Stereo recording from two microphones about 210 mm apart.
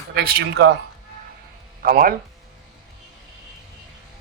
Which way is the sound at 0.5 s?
65° right (ahead or behind).